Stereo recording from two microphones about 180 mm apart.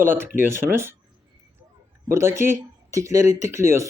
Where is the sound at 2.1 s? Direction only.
15° right (ahead or behind).